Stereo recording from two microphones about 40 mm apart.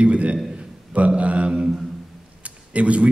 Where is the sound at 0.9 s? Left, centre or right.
Right.